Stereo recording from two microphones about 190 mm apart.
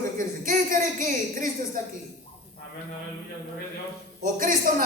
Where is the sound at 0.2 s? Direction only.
45° right (ahead or behind).